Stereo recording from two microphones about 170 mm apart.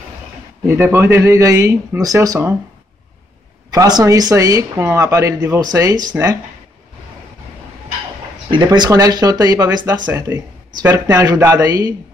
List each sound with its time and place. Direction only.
0.7 s a man's voice: 15° right (ahead or behind)
3.7 s speech: 20° right (ahead or behind)
8.5 s a man's voice: 25° right (ahead or behind)